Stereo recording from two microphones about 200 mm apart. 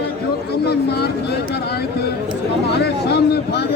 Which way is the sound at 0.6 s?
55° left (ahead or behind).